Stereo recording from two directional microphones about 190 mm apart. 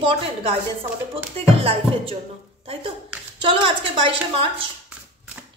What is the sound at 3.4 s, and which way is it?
A woman's voice, 25° right (ahead or behind).